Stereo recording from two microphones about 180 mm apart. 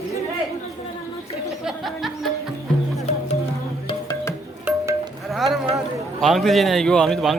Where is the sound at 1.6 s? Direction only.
Centre (ahead or behind).